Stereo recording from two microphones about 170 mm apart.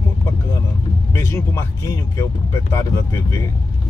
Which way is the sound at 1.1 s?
15° left (ahead or behind).